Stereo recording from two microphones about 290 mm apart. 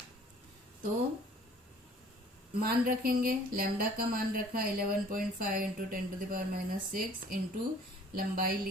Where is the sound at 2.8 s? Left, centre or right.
Right.